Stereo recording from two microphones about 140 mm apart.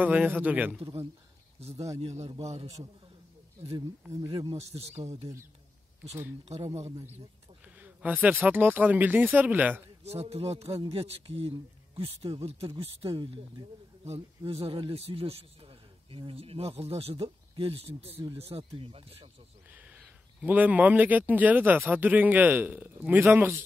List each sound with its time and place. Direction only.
0.0 s speech: 10° right (ahead or behind)
2.0 s speech: 50° right (ahead or behind)
3.7 s speech: 20° right (ahead or behind)
4.6 s speech: 50° right (ahead or behind)
6.5 s speech: 50° right (ahead or behind)
7.7 s speech: 10° right (ahead or behind)
10.0 s speech: 45° right (ahead or behind)
19.7 s speech: 10° right (ahead or behind)